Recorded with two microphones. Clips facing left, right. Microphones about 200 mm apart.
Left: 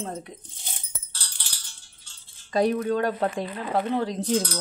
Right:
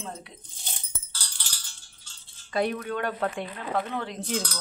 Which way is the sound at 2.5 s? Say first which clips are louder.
Left 5 dB; 35° left (ahead or behind).